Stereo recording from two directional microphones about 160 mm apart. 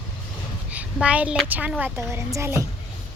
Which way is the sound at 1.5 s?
10° right (ahead or behind).